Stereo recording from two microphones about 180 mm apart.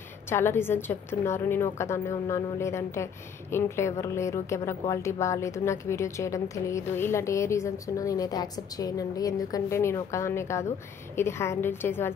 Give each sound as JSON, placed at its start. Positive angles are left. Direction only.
{"t": 0.3, "sound": "a woman's voice", "side_deg": 15}